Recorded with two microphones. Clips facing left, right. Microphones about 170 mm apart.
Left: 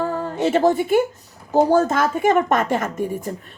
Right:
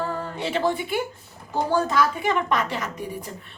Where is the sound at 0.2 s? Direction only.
45° left (ahead or behind).